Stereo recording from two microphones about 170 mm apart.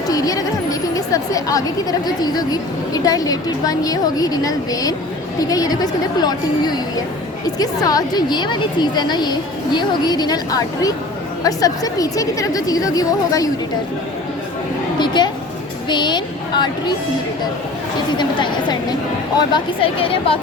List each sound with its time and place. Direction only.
0.1 s a woman's voice: 20° left (ahead or behind)
14.9 s a woman's voice: 25° left (ahead or behind)
18.2 s a woman's voice: 25° left (ahead or behind)